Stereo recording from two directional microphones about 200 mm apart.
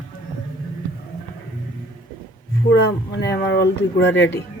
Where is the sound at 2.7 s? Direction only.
55° left (ahead or behind).